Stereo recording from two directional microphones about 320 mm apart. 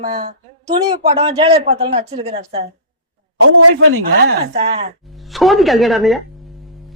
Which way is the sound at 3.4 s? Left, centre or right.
Right.